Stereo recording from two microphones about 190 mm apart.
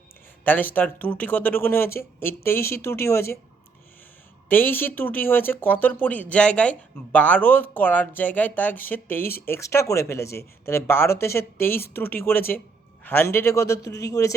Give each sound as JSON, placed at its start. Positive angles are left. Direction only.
{"t": 0.4, "sound": "speech", "side_deg": 10}
{"t": 4.4, "sound": "speech", "side_deg": 10}